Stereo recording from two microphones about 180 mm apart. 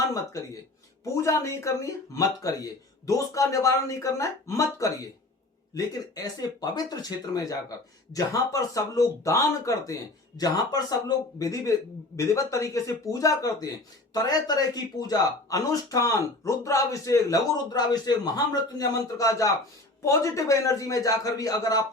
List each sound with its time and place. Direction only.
1.0 s speech: 15° left (ahead or behind)